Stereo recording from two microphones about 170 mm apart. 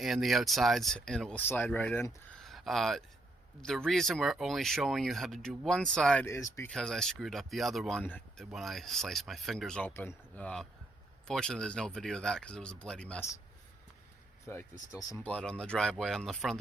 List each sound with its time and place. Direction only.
0.0 s speech: centre (ahead or behind)
2.4 s a sound: centre (ahead or behind)
3.6 s speech: 5° left (ahead or behind)
6.2 s speech: 15° left (ahead or behind)
6.7 s speech: 5° left (ahead or behind)
14.4 s speech: 15° left (ahead or behind)
15.3 s speech: 5° left (ahead or behind)